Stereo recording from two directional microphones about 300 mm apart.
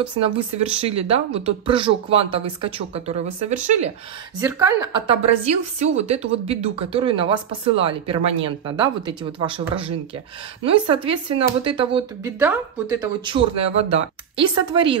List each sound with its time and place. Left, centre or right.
0.0 s speech: centre
4.4 s speech: centre
12.4 s speech: centre